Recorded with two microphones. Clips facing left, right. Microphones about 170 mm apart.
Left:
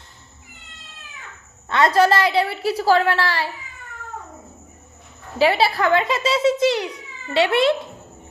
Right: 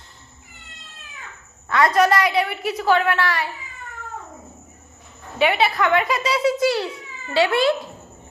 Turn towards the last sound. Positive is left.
turn(degrees=25)  # may be behind; listen again after turning